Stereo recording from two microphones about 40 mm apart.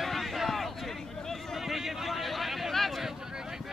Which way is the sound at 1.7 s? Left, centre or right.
Centre.